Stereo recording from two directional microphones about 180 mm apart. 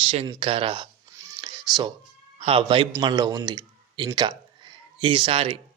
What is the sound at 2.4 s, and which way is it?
Speech, 30° right (ahead or behind).